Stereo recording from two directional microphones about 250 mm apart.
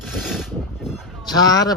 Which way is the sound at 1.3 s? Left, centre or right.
Centre.